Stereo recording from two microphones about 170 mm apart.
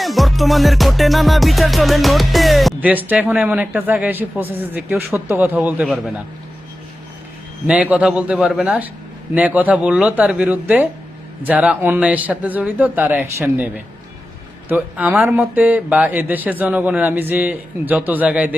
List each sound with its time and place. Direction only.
0.0 s music: centre (ahead or behind)
7.7 s speech: 10° right (ahead or behind)
14.7 s speech: 10° right (ahead or behind)